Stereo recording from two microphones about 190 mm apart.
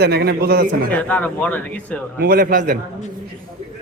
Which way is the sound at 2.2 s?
50° right (ahead or behind).